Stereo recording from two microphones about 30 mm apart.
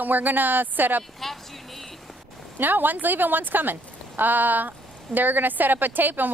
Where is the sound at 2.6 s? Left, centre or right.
Right.